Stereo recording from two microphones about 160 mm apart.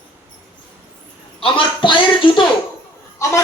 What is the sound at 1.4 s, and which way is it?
Speech, 30° left (ahead or behind).